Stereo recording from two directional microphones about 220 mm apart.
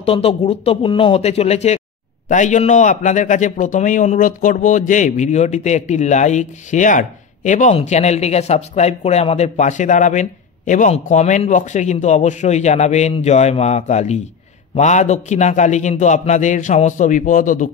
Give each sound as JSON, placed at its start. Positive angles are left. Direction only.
{"t": 0.0, "sound": "a man's voice", "side_deg": 25}